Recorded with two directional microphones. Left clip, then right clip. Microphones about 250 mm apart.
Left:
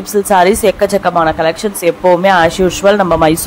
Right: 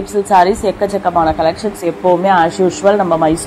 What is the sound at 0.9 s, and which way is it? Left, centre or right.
Speech, left.